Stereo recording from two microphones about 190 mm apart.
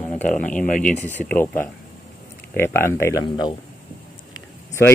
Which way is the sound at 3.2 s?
25° left (ahead or behind).